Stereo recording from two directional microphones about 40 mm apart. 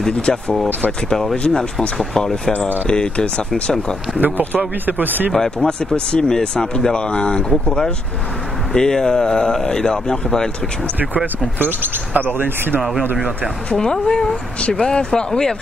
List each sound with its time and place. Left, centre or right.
0.2 s speech: left
1.5 s speech: centre
2.9 s speech: left
4.2 s a man's voice: right
5.3 s speech: centre
5.9 s speech: left
11.5 s speech: right
13.7 s speech: centre